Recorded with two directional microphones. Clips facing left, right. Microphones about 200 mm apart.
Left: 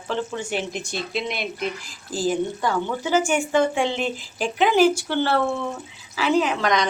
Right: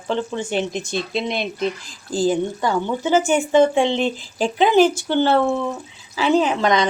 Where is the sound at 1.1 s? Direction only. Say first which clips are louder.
Right 4 dB; 25° right (ahead or behind).